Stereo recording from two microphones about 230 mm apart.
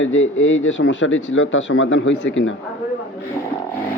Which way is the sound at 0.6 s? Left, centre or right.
Left.